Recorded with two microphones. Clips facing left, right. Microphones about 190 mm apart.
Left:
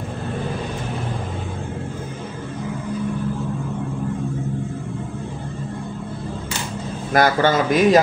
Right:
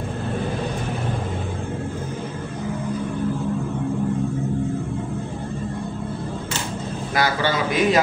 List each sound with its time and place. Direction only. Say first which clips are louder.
7.2 s a man's voice: left 5 dB; 50° left (ahead or behind)